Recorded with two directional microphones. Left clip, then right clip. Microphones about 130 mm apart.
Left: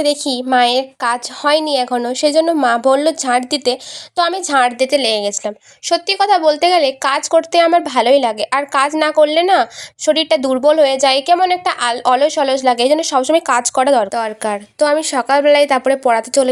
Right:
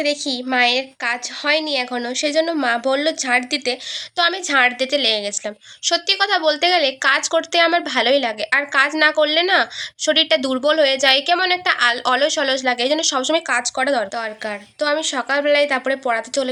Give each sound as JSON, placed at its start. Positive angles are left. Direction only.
{"t": 0.0, "sound": "a woman's voice", "side_deg": 45}
{"t": 4.2, "sound": "a woman's voice", "side_deg": 30}
{"t": 13.5, "sound": "speech", "side_deg": 55}